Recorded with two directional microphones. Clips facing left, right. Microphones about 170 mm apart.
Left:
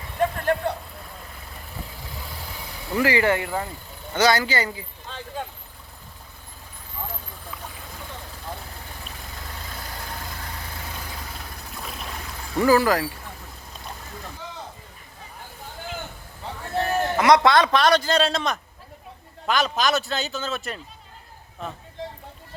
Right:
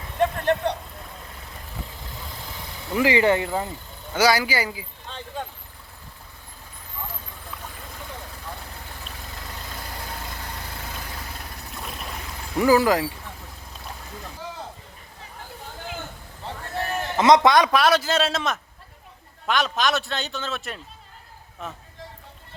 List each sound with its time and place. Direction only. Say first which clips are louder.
0.2 s a sound: right 1 dB; 5° left (ahead or behind)
2.9 s speech: right 1 dB; 20° right (ahead or behind)
4.1 s a man's voice: even; 10° right (ahead or behind)
5.0 s vehicle: even; 5° left (ahead or behind)
11.7 s boat: even; centre (ahead or behind)
12.5 s a man's voice: even; 15° right (ahead or behind)
17.2 s a man's voice: right 2 dB; 20° right (ahead or behind); by 20.8 s centre (ahead or behind)